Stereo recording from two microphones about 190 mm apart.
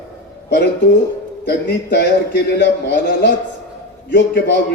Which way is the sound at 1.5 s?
60° left (ahead or behind).